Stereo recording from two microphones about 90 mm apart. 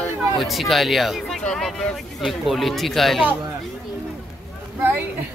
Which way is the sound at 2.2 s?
Centre (ahead or behind).